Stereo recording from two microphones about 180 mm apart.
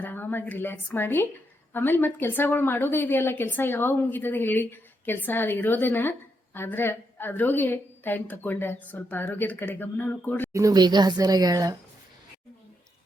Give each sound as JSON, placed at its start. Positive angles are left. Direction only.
{"t": 0.0, "sound": "a woman's voice", "side_deg": 10}
{"t": 10.5, "sound": "a woman's voice", "side_deg": -20}